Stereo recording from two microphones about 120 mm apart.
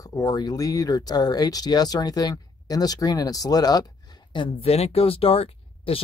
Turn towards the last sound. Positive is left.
turn(degrees=55)  # may be behind; listen again after turning